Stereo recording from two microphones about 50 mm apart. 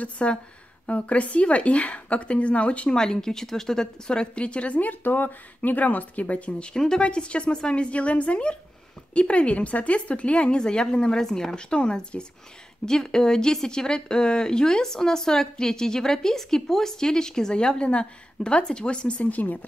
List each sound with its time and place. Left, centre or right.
0.0 s speech: left
3.0 s speech: centre
6.7 s speech: centre
10.6 s speech: centre; by 19.6 s left